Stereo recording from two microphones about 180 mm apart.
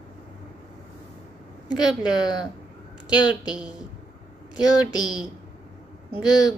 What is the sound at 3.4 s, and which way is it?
Speech, 5° right (ahead or behind).